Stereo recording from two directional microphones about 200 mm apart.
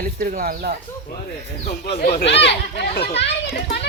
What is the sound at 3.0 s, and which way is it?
Speech, 30° left (ahead or behind).